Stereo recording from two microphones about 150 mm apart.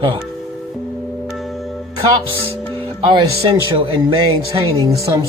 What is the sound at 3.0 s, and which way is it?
Speech, 35° right (ahead or behind).